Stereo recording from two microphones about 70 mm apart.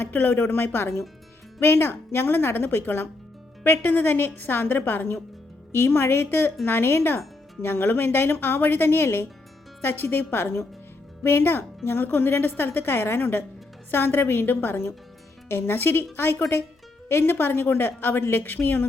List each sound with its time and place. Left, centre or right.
0.0 s speech: left